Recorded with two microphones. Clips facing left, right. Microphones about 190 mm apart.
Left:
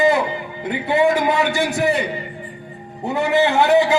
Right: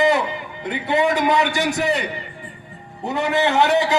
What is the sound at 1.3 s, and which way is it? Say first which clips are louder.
Speech: left 1 dB; 20° right (ahead or behind).